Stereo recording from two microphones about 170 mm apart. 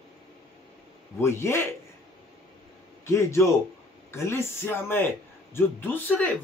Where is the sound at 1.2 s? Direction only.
15° left (ahead or behind).